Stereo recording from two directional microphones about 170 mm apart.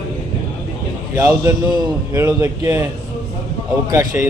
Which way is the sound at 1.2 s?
15° right (ahead or behind).